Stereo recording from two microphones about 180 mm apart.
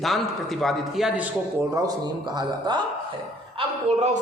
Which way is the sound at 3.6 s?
40° right (ahead or behind).